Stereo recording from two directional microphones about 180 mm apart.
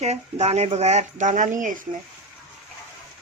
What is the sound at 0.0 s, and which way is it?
Speech, 35° right (ahead or behind).